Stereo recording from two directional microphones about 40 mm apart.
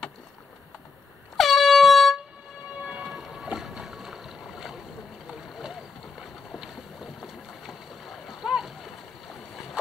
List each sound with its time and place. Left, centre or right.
1.3 s air horn: centre
2.8 s train: right
3.5 s boat: centre